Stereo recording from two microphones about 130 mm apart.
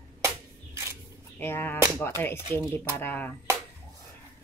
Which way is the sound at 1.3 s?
15° left (ahead or behind).